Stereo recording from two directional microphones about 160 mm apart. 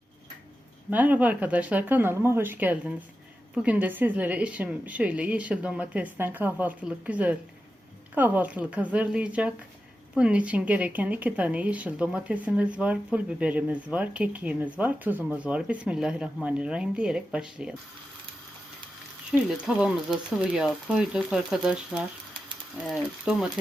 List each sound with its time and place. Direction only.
0.9 s speech: 10° right (ahead or behind)
19.3 s speech: 5° right (ahead or behind)